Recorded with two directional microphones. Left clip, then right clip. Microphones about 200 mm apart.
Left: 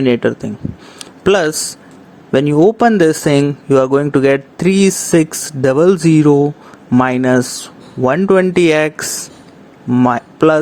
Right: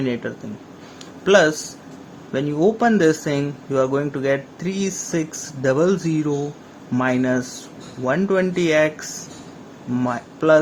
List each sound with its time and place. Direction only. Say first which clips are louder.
0.0 s speech: left 12 dB; 40° left (ahead or behind)
0.9 s a sound: left 2 dB; 45° left (ahead or behind)
2.3 s speech: left 9 dB; 40° left (ahead or behind)